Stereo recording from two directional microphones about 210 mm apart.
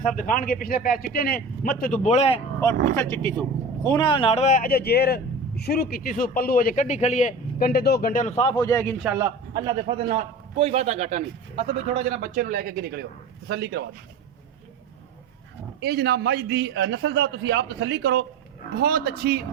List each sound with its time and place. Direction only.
0.2 s a man's voice: 40° left (ahead or behind)
2.9 s a man's voice: 15° left (ahead or behind)
9.0 s a man's voice: 10° right (ahead or behind)
9.6 s a man's voice: 20° right (ahead or behind)
10.1 s a man's voice: 30° right (ahead or behind); by 13.8 s 50° right (ahead or behind)
15.8 s a man's voice: 50° right (ahead or behind)